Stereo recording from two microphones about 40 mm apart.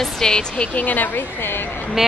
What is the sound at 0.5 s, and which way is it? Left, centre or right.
Speech, left.